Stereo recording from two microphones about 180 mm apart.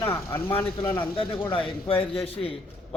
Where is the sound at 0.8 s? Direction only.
25° left (ahead or behind).